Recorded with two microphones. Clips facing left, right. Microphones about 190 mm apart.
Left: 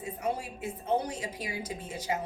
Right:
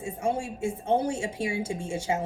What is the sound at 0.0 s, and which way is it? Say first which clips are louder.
Speech: right 4 dB; 25° right (ahead or behind).